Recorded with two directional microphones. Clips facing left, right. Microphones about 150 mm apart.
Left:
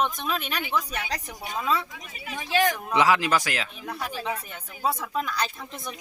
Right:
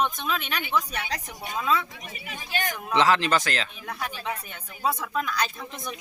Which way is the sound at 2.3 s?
90° left.